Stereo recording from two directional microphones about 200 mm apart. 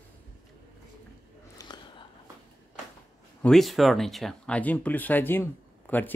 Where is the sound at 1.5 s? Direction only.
20° left (ahead or behind).